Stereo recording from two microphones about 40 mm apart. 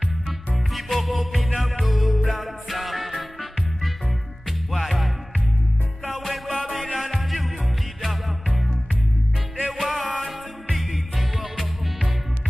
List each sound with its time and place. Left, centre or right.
0.7 s music: centre
4.5 s music: centre
6.1 s music: centre
9.7 s music: centre